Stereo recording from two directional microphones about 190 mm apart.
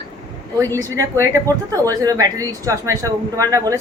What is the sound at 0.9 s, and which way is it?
Speech, 15° right (ahead or behind).